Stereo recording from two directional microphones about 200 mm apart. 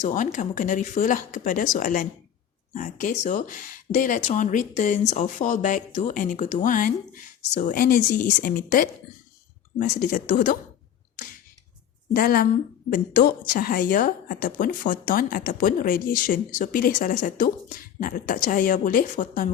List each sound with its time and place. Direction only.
0.0 s speech: 40° left (ahead or behind)
12.1 s a woman's voice: 45° left (ahead or behind)